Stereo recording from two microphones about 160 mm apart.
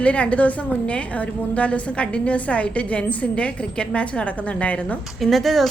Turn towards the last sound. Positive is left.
turn(degrees=0)  # may be behind; listen again after turning